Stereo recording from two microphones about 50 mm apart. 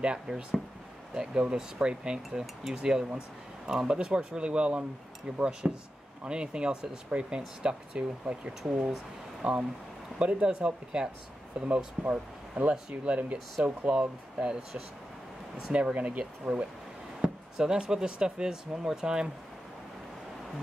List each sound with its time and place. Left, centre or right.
0.0 s speech: centre
13.9 s speech: centre
15.7 s speech: right
17.2 s a sound: centre
17.6 s speech: centre